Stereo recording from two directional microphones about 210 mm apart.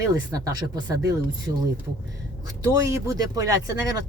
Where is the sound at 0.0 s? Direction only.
15° right (ahead or behind).